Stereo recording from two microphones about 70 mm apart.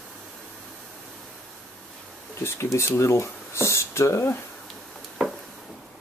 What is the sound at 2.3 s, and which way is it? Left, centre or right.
Speech, left.